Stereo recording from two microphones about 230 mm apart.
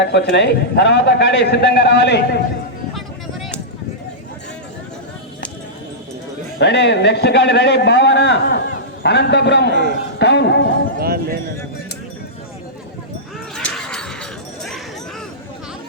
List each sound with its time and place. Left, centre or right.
0.0 s a man's voice: left
2.9 s a sound: centre
6.6 s a man's voice: left
9.6 s a man's voice: right
10.2 s a man's voice: left
11.0 s speech: right
13.6 s a sound: centre